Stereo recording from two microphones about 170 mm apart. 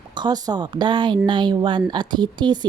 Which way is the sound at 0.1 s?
25° right (ahead or behind).